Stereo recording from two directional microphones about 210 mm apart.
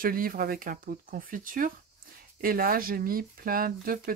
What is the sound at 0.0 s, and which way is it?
Speech, 45° right (ahead or behind).